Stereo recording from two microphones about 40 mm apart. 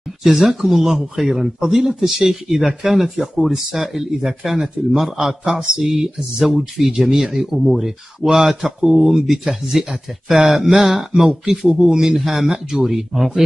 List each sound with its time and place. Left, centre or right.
0.2 s speech: centre
11.8 s speech: centre
12.3 s speech: centre